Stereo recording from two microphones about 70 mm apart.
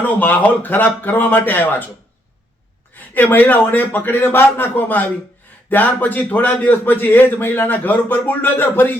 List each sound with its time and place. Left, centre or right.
0.0 s a man's voice: left
2.9 s a man's voice: left